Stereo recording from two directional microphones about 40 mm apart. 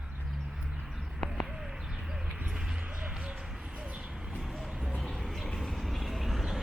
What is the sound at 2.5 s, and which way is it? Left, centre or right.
Basketball bounce, centre.